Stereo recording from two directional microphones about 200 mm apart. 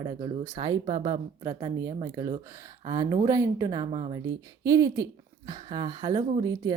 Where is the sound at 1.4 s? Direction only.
15° right (ahead or behind).